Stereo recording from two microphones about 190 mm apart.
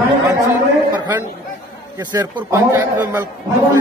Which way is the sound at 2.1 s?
15° right (ahead or behind).